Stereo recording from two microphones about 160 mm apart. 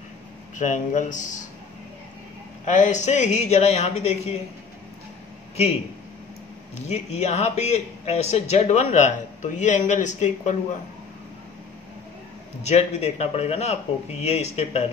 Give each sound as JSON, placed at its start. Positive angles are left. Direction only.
{"t": 0.6, "sound": "a man's voice", "side_deg": 50}
{"t": 2.6, "sound": "a man's voice", "side_deg": 50}
{"t": 6.9, "sound": "a man's voice", "side_deg": 45}
{"t": 12.6, "sound": "a man's voice", "side_deg": 45}